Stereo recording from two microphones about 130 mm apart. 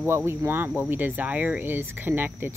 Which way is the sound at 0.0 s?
20° right (ahead or behind).